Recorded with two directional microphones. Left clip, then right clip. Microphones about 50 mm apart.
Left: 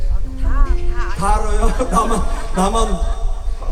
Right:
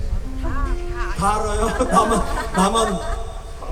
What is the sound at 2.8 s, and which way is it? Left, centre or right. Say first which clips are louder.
Speech: right 1 dB; right.